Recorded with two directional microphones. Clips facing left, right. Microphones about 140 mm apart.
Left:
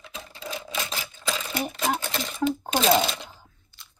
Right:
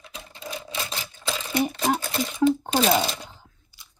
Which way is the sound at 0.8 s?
Centre (ahead or behind).